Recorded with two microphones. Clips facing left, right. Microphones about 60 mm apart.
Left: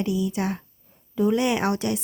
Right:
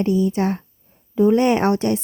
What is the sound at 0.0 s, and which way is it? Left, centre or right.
A woman's voice, right.